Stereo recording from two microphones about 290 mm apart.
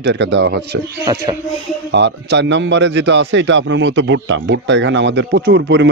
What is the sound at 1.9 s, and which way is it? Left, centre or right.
Speech, right.